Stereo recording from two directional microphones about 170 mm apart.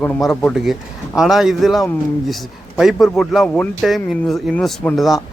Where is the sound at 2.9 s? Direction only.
Centre (ahead or behind).